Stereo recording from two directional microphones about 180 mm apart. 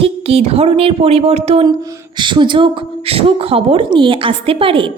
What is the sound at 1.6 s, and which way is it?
Speech, 20° right (ahead or behind).